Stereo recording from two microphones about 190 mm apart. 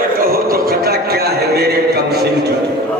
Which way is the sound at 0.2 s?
50° right (ahead or behind).